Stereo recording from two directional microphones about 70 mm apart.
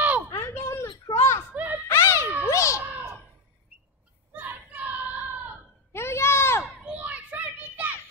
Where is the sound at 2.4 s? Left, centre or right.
Left.